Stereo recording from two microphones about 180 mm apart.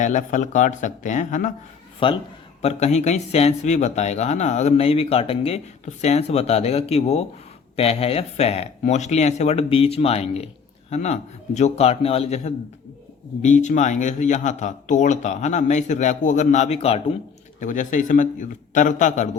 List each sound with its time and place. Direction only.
0.0 s a man's voice: 45° left (ahead or behind)
2.0 s a man's voice: 25° left (ahead or behind)